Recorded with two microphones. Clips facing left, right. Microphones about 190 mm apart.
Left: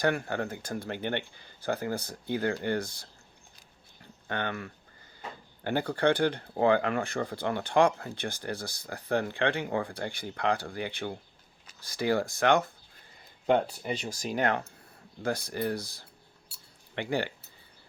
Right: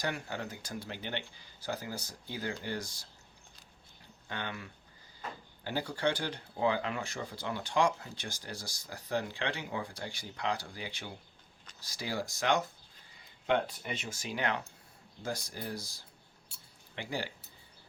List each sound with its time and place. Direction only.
0.0 s speech: 55° left (ahead or behind)
4.3 s speech: 60° left (ahead or behind)
13.5 s speech: 35° left (ahead or behind)
15.2 s speech: 60° left (ahead or behind)